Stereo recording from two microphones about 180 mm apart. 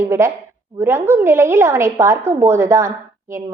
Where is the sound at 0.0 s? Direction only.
15° right (ahead or behind).